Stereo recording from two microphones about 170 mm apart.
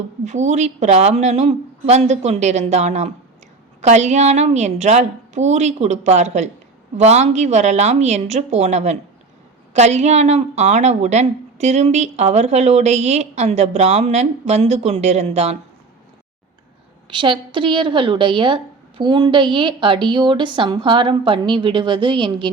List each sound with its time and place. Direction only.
0.3 s a woman's voice: 45° right (ahead or behind)
17.1 s a woman's voice: 25° right (ahead or behind)